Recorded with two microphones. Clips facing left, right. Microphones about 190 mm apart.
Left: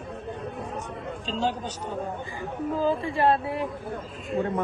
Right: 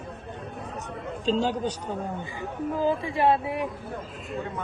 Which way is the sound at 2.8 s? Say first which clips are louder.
Even; 15° right (ahead or behind).